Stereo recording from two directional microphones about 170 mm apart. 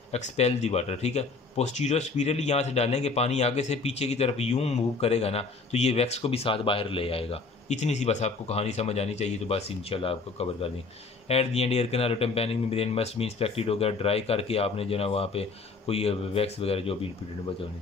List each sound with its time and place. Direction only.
0.1 s speech: 40° left (ahead or behind)